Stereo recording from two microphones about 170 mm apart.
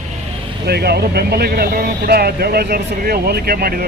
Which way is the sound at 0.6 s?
70° right (ahead or behind).